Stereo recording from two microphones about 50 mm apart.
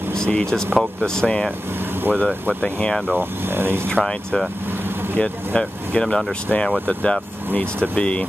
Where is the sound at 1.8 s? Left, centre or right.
Right.